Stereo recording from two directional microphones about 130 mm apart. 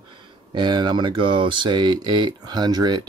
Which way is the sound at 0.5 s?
35° right (ahead or behind).